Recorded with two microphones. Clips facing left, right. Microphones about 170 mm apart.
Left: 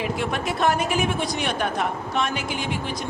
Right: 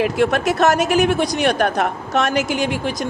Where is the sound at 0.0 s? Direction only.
75° right (ahead or behind).